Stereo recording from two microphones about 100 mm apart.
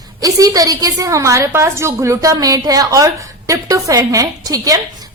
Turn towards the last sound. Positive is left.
turn(degrees=-40)  # may be behind; listen again after turning